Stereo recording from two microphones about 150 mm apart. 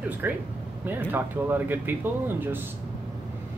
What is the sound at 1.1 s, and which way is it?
Speech, 15° right (ahead or behind).